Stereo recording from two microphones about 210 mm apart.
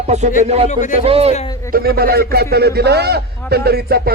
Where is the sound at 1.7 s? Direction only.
45° right (ahead or behind).